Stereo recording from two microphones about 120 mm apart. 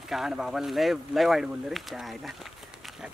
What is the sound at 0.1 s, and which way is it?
Speech, 5° right (ahead or behind).